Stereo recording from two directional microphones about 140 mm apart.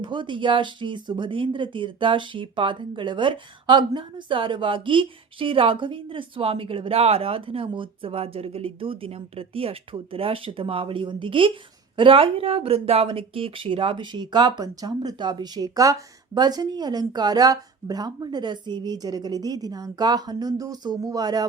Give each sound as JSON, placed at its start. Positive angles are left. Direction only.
{"t": 0.0, "sound": "speech", "side_deg": -35}